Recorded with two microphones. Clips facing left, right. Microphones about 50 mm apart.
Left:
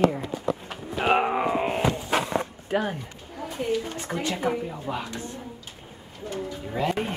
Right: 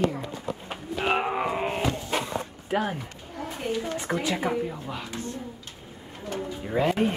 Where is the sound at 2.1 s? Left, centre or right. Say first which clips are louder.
Left 4 dB; left.